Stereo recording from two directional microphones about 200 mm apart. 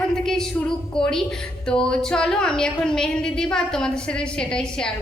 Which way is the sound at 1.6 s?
5° left (ahead or behind).